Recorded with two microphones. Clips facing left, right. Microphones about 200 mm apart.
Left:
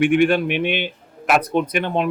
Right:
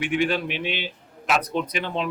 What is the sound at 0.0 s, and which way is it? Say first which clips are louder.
A man's voice: left 8 dB; 55° left (ahead or behind).